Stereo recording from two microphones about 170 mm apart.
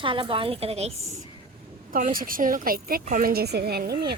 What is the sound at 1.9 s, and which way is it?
A woman's voice, 55° right (ahead or behind).